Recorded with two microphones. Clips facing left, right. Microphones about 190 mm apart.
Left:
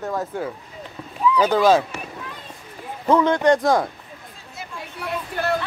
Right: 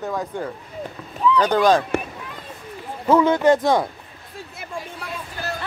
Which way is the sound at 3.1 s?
5° right (ahead or behind).